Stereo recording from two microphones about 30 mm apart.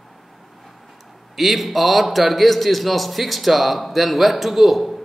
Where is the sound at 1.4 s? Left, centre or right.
Centre.